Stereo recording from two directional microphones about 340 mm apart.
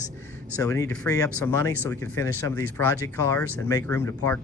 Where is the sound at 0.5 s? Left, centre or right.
Centre.